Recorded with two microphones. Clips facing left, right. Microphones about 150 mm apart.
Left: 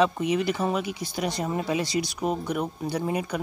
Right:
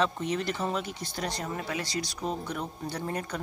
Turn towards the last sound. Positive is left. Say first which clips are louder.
# left 6 dB
turn(degrees=10)  # may be behind; listen again after turning